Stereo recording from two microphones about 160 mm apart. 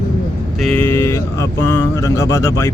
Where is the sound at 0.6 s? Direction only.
10° left (ahead or behind).